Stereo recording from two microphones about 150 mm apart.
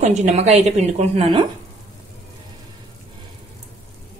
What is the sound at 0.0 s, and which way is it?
Speech, 50° right (ahead or behind).